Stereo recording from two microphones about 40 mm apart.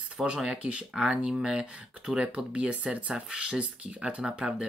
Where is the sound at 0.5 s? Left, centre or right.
Right.